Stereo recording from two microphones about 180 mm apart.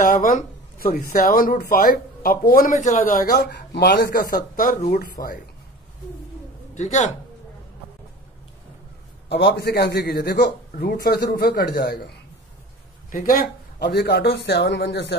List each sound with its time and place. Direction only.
0.1 s speech: 50° left (ahead or behind)
6.7 s a man's voice: 40° left (ahead or behind)
9.3 s speech: 65° left (ahead or behind)
13.1 s speech: 55° left (ahead or behind); by 15.1 s 70° left (ahead or behind)